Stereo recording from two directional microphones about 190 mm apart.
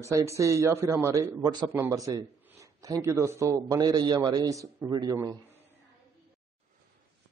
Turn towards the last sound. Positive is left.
turn(degrees=-15)  # may be behind; listen again after turning